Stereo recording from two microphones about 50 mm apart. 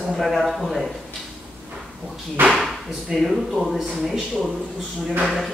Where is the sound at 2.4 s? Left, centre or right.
Right.